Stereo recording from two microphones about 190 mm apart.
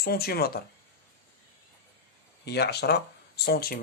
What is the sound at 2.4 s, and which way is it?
Speech, 60° left (ahead or behind).